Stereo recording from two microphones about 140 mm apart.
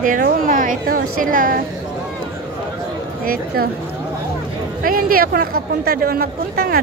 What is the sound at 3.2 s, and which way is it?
Speech, 90° right.